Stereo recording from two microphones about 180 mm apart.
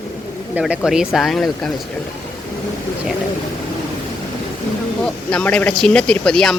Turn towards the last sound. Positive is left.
turn(degrees=5)  # may be behind; listen again after turning